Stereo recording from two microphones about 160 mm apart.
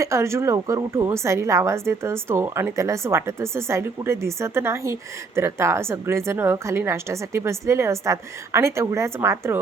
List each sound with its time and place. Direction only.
0.0 s a woman's voice: 15° right (ahead or behind)